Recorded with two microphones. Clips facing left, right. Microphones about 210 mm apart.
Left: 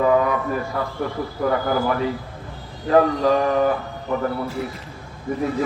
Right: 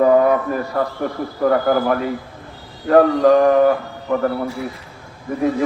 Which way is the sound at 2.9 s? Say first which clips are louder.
Right 5 dB; 50° right (ahead or behind).